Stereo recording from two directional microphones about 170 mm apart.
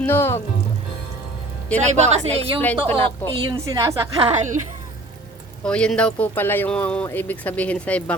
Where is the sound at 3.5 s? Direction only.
20° right (ahead or behind).